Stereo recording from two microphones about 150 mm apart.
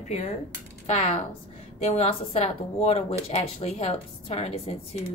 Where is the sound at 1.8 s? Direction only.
45° left (ahead or behind).